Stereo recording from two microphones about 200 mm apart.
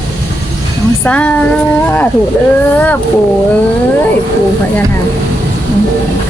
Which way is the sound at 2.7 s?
10° left (ahead or behind).